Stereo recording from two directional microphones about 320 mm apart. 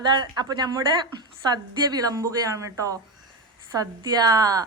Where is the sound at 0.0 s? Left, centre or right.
Centre.